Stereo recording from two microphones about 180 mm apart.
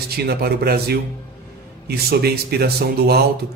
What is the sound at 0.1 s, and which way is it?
A man's voice, 60° right (ahead or behind).